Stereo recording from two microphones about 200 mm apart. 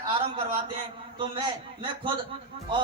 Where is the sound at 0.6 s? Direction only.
25° right (ahead or behind).